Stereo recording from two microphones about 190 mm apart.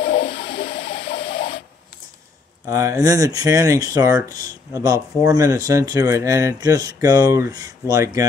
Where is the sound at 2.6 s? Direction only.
15° right (ahead or behind).